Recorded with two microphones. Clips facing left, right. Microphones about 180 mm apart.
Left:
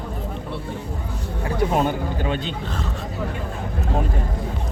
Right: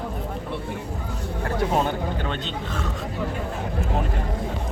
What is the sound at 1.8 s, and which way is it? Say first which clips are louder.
Speech: left 3 dB; 10° left (ahead or behind).